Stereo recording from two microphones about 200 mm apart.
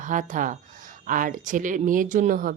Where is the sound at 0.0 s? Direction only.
40° right (ahead or behind).